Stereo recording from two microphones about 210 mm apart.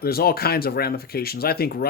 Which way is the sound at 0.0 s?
45° left (ahead or behind).